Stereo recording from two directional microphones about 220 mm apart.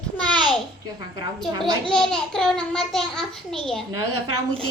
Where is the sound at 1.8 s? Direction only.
5° left (ahead or behind).